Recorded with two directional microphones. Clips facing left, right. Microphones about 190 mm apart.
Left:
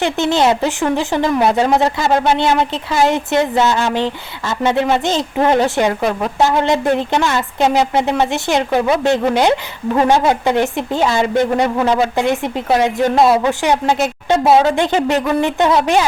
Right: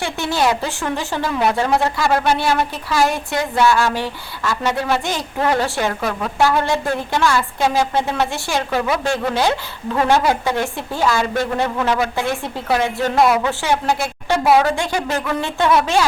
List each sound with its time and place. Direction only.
0.0 s speech: 20° left (ahead or behind)